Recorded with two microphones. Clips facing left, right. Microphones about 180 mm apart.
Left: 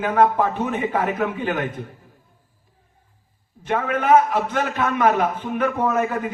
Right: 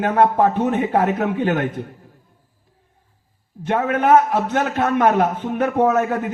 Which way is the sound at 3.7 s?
45° right (ahead or behind).